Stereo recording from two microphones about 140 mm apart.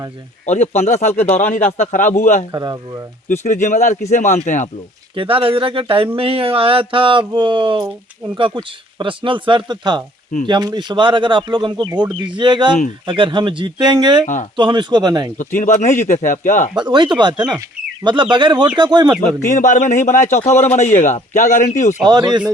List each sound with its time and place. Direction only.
0.4 s a man's voice: 55° left (ahead or behind)
1.5 s speech: 60° left (ahead or behind)
2.5 s speech: 25° right (ahead or behind)
3.4 s speech: 65° left (ahead or behind)
5.1 s speech: 40° right (ahead or behind)
15.4 s speech: 65° left (ahead or behind)
16.7 s speech: 35° right (ahead or behind)
19.5 s a man's voice: 65° left (ahead or behind)
22.0 s speech: 30° right (ahead or behind)